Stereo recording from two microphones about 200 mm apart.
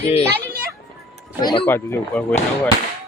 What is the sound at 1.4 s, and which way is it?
Speech, 25° left (ahead or behind).